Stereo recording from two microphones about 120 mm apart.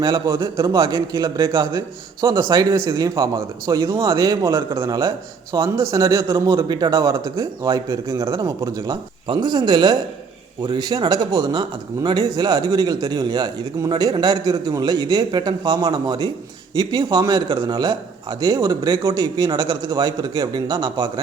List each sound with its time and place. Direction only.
0.0 s a man's voice: 25° right (ahead or behind)
3.9 s a man's voice: 40° right (ahead or behind); by 4.9 s 25° right (ahead or behind)
4.9 s a man's voice: 35° right (ahead or behind)